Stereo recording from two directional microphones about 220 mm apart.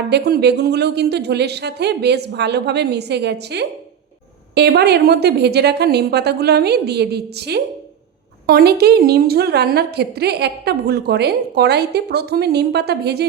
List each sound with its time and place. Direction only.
0.1 s a woman's voice: 50° right (ahead or behind)